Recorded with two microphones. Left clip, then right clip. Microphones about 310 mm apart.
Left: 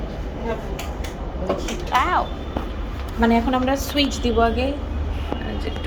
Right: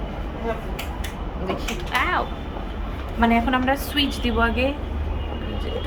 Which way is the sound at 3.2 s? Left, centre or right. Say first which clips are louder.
Left 1 dB; centre.